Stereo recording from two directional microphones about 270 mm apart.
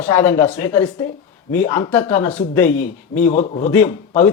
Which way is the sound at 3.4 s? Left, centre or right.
Left.